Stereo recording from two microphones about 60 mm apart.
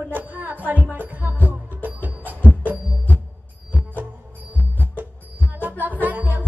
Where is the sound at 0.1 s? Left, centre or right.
Right.